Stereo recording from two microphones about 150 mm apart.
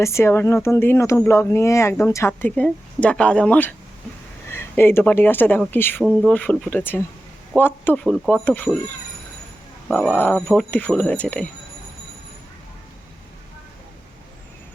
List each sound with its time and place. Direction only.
0.0 s speech: 20° left (ahead or behind)
4.8 s speech: 15° left (ahead or behind)
6.1 s speech: centre (ahead or behind)
6.3 s speech: 10° left (ahead or behind)
10.2 s speech: 10° left (ahead or behind)